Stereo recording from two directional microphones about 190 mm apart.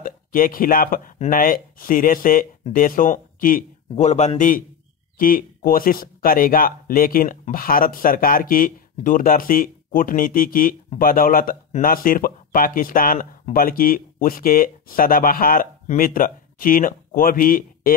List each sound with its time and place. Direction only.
0.0 s speech: 50° left (ahead or behind)
3.9 s a man's voice: 35° left (ahead or behind)